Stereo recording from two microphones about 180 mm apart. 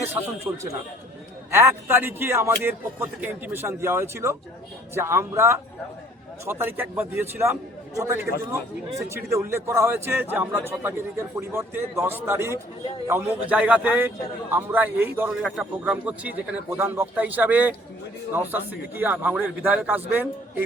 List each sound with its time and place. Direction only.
0.1 s speech: 15° right (ahead or behind)
15.4 s speech: centre (ahead or behind)